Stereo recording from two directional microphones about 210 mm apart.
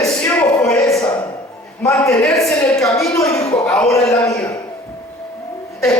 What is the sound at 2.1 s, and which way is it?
A man's voice, 5° left (ahead or behind).